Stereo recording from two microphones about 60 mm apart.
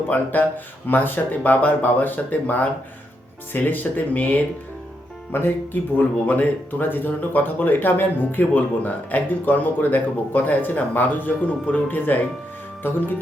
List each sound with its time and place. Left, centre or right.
0.1 s speech: left
5.3 s speech: left
6.0 s speech: left